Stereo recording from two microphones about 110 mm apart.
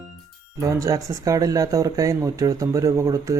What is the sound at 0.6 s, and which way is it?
Speech, 30° right (ahead or behind).